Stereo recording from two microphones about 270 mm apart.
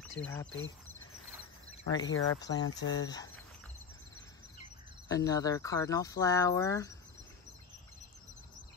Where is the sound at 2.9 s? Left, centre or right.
Centre.